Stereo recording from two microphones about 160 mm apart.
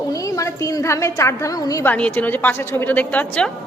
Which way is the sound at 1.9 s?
10° left (ahead or behind).